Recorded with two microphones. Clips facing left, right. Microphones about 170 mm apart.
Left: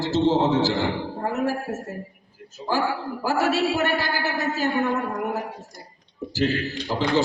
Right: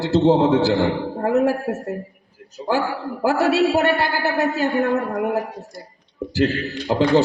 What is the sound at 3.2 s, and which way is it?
A man's voice, 65° right (ahead or behind).